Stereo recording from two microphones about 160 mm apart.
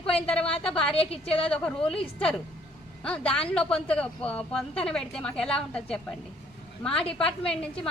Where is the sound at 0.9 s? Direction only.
35° left (ahead or behind).